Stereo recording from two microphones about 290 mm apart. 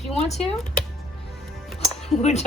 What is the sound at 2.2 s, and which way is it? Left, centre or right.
Speech, left.